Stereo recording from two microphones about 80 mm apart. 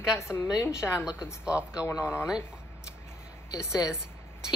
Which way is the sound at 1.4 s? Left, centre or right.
Centre.